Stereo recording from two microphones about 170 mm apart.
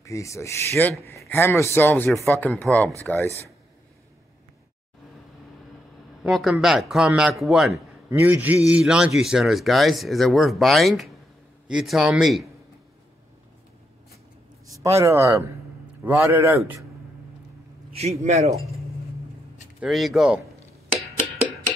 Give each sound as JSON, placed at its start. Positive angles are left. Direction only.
{"t": 0.0, "sound": "speech", "side_deg": 20}
{"t": 6.2, "sound": "a man's voice", "side_deg": -5}
{"t": 14.8, "sound": "a man's voice", "side_deg": -15}
{"t": 17.9, "sound": "a man's voice", "side_deg": -40}
{"t": 19.8, "sound": "a man's voice", "side_deg": 0}